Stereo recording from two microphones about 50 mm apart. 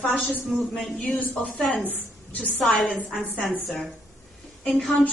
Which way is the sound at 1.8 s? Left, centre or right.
Left.